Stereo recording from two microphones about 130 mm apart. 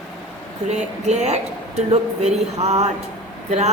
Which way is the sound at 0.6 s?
60° right (ahead or behind).